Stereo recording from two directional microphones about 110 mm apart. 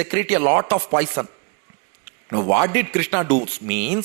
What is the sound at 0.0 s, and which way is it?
Speech, 20° right (ahead or behind).